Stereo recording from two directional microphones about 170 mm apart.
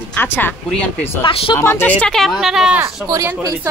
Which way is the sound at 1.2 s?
30° left (ahead or behind).